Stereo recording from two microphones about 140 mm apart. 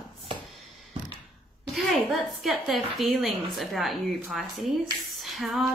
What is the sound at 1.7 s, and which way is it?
A woman's voice, centre (ahead or behind).